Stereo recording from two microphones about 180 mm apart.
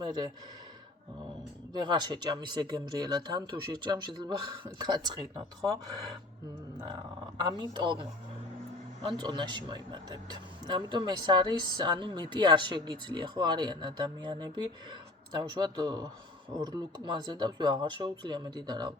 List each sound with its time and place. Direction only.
0.0 s speech: 25° right (ahead or behind)
1.7 s speech: 25° right (ahead or behind)
7.3 s speech: 25° right (ahead or behind)
9.1 s speech: 25° right (ahead or behind)